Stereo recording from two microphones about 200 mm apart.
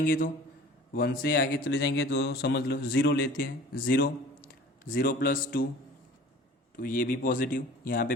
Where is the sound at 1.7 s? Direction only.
65° left (ahead or behind); by 5.7 s 45° left (ahead or behind).